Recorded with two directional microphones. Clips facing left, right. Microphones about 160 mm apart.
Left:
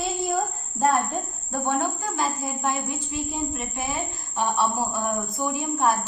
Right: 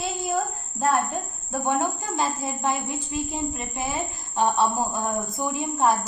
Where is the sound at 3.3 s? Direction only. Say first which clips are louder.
Even; 20° right (ahead or behind).